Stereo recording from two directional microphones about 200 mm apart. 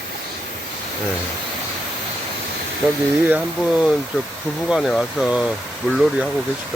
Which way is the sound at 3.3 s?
5° right (ahead or behind).